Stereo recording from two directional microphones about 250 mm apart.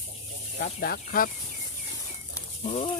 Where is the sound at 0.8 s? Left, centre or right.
Left.